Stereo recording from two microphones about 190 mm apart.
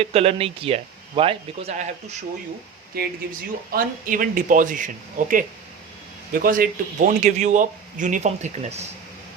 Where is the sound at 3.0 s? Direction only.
55° right (ahead or behind).